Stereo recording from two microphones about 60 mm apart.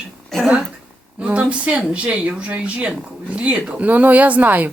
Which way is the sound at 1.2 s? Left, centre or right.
Right.